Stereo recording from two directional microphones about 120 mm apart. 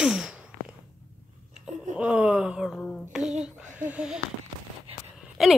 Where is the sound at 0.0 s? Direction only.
5° right (ahead or behind).